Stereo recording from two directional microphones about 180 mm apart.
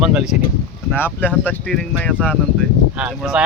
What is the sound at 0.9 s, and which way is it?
A man's voice, 10° left (ahead or behind).